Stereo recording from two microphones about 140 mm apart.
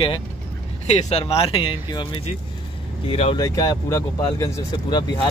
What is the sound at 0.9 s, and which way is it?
Speech, 50° left (ahead or behind).